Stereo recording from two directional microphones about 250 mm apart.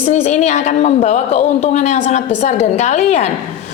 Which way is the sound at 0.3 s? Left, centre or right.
Left.